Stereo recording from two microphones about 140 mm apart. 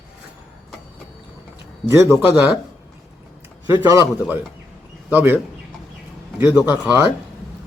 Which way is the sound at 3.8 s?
25° right (ahead or behind).